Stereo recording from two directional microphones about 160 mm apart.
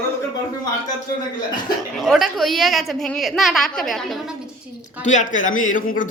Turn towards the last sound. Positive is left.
turn(degrees=55)  # may be behind; listen again after turning